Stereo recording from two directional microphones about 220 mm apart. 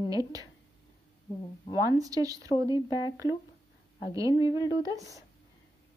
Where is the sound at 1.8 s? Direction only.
15° right (ahead or behind).